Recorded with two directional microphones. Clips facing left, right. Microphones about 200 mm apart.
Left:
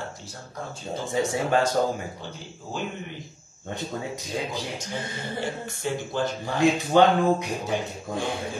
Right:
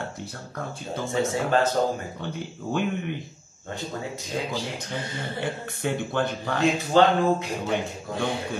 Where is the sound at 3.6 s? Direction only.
20° left (ahead or behind).